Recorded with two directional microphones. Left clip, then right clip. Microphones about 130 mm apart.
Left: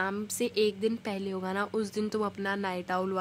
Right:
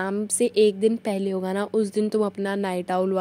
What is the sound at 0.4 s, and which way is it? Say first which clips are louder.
A woman's voice: right 9 dB; 35° right (ahead or behind).